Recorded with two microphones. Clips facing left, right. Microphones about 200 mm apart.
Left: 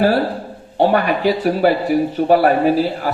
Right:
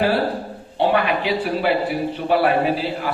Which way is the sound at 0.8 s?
45° left (ahead or behind).